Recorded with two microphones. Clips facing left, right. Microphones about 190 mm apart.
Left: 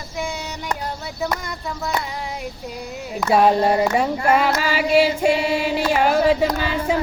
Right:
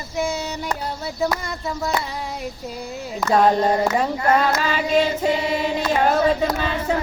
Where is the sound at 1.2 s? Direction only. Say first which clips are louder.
Right 2 dB; centre (ahead or behind).